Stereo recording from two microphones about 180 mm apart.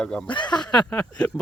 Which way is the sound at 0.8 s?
5° left (ahead or behind).